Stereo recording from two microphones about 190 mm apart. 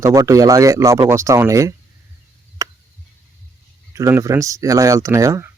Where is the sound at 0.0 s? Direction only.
15° right (ahead or behind).